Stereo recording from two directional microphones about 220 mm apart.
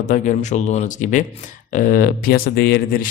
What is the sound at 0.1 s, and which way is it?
Speech, 35° left (ahead or behind).